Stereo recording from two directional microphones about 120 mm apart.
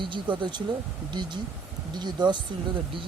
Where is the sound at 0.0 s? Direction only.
40° right (ahead or behind).